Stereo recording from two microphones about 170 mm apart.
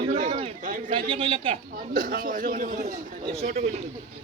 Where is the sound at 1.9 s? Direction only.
55° right (ahead or behind).